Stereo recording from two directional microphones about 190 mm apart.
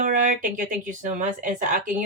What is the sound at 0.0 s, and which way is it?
Speech, 45° right (ahead or behind).